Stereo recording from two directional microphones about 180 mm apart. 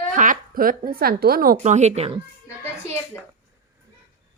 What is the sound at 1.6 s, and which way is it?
Speech, 40° right (ahead or behind).